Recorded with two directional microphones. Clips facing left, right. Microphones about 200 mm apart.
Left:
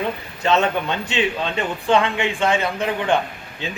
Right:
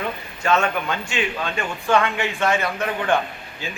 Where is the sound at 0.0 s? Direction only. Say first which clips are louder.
Left 3 dB; 20° left (ahead or behind).